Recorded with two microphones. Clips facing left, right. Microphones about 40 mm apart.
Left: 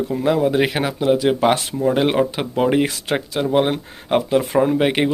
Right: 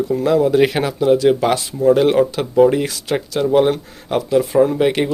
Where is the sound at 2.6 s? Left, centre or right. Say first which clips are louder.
Right 4 dB; left.